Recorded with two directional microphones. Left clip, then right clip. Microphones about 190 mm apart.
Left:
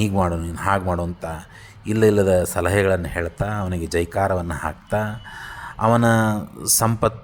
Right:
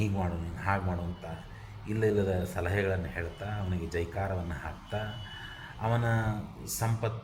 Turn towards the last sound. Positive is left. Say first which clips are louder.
# left 15 dB
turn(degrees=35)  # may be behind; listen again after turning